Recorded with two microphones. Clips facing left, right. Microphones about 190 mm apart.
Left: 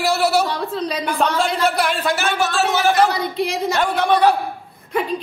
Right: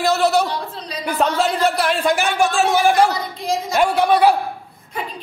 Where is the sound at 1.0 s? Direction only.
5° right (ahead or behind).